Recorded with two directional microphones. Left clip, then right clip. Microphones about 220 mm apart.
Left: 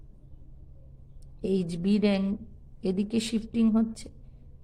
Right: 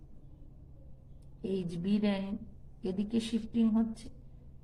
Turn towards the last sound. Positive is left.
turn(degrees=50)  # may be behind; listen again after turning